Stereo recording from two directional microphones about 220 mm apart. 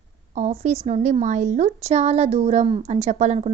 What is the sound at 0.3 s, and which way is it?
A woman's voice, 30° right (ahead or behind).